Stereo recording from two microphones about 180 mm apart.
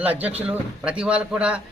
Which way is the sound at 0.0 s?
10° right (ahead or behind).